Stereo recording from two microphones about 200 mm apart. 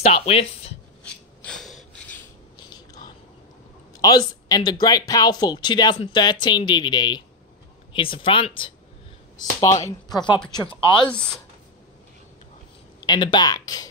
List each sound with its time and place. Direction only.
0.0 s speech: 30° left (ahead or behind)
1.0 s filing: 5° left (ahead or behind)
3.9 s a sound: 20° left (ahead or behind)
4.5 s speech: 20° left (ahead or behind)
11.1 s speech: 5° left (ahead or behind)
13.0 s speech: 25° left (ahead or behind)